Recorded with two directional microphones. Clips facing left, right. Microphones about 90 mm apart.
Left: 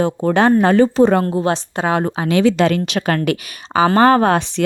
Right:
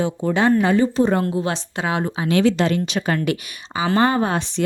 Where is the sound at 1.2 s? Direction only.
45° left (ahead or behind).